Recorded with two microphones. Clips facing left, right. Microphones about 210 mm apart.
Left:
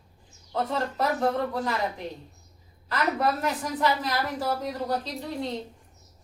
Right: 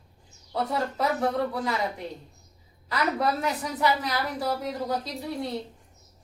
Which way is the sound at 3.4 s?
10° right (ahead or behind).